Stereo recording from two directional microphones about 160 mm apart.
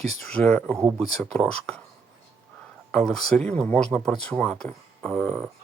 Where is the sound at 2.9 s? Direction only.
5° left (ahead or behind).